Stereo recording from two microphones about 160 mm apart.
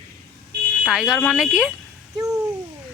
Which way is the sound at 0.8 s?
Centre (ahead or behind).